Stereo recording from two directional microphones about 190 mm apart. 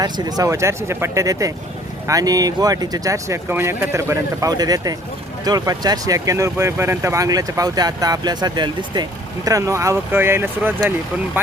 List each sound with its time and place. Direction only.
0.0 s speech: 20° right (ahead or behind)